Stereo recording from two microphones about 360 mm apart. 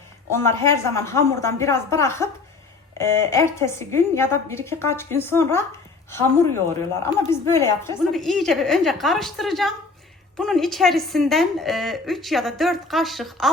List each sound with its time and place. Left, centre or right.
0.3 s a woman's voice: centre
7.0 s a woman's voice: centre